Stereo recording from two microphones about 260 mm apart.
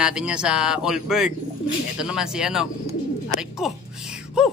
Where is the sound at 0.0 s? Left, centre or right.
Centre.